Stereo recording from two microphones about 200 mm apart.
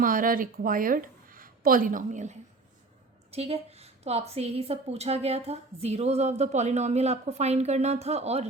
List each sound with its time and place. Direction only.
0.0 s a woman's voice: 45° right (ahead or behind)
3.3 s a woman's voice: 30° right (ahead or behind)